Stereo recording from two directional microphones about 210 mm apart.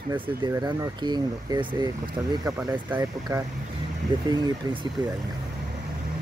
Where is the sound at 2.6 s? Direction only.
10° right (ahead or behind).